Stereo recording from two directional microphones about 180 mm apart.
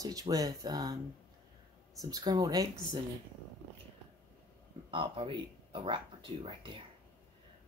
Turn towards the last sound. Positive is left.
turn(degrees=-25)  # may be behind; listen again after turning